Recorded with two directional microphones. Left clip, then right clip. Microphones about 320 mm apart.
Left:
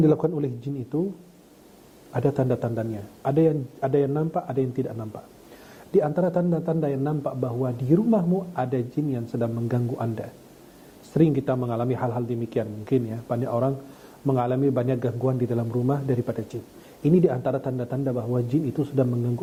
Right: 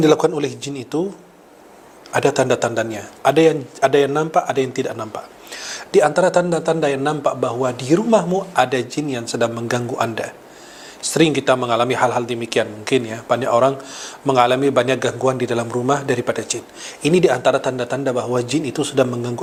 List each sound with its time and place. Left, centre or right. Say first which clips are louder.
0.0 s a man's voice: right 7 dB; centre
2.1 s a man's voice: right 9 dB; centre
9.3 s a man's voice: right 11 dB; centre